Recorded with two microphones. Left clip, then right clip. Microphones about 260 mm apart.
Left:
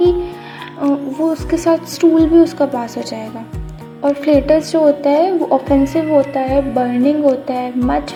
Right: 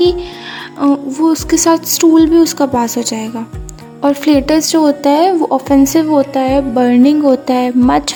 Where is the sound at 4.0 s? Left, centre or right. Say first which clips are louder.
Right 2 dB; right.